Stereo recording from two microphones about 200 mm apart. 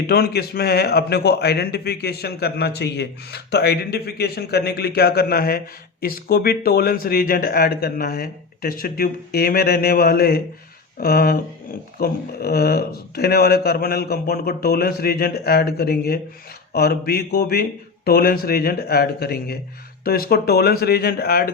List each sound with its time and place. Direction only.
0.1 s a man's voice: 50° left (ahead or behind)